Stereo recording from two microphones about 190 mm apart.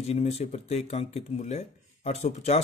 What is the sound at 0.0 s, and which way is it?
Speech, 35° left (ahead or behind).